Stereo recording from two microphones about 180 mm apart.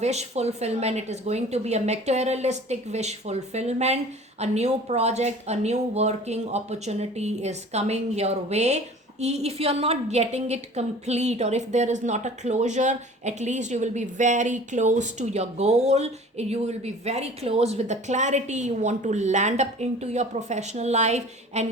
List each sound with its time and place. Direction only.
0.0 s a woman's voice: 35° right (ahead or behind)